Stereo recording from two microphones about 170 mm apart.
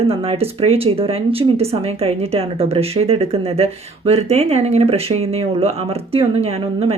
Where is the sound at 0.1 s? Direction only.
35° right (ahead or behind).